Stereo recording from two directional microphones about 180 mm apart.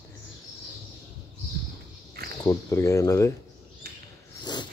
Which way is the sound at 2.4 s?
20° left (ahead or behind).